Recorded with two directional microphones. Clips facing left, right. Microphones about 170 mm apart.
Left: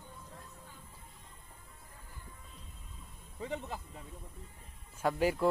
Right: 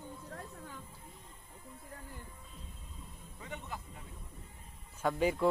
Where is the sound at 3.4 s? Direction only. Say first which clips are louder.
Left 6 dB; 30° left (ahead or behind).